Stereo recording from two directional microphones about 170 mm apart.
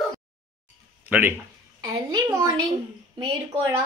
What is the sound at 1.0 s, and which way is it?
Speech, 10° right (ahead or behind).